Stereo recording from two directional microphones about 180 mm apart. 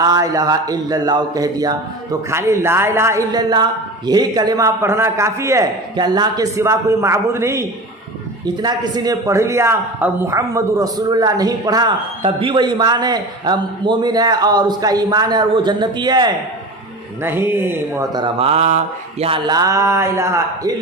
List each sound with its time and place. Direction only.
0.0 s a man's voice: 20° right (ahead or behind)
8.6 s a man's voice: 20° right (ahead or behind)
17.2 s a man's voice: 10° right (ahead or behind); by 18.8 s 35° right (ahead or behind)
19.2 s a man's voice: 25° right (ahead or behind)